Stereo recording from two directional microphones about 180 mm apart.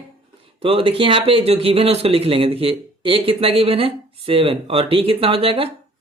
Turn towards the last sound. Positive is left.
turn(degrees=-30)  # may be behind; listen again after turning